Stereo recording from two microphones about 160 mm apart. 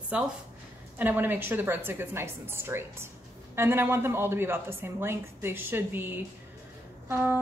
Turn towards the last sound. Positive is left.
turn(degrees=-15)  # may be behind; listen again after turning